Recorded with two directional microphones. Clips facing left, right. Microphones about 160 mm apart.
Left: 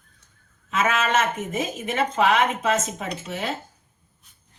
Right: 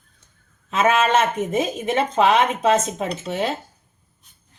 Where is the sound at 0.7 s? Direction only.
30° right (ahead or behind).